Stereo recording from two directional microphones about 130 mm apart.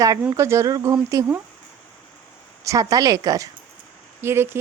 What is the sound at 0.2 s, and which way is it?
Speech, 20° right (ahead or behind).